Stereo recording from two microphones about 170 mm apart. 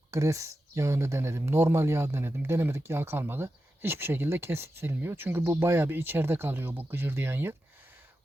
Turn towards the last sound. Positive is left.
turn(degrees=-10)  # may be behind; listen again after turning